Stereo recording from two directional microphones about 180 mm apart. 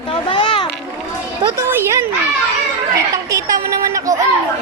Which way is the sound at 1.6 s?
15° right (ahead or behind).